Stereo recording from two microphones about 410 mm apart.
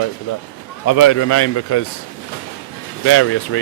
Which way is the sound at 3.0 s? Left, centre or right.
Left.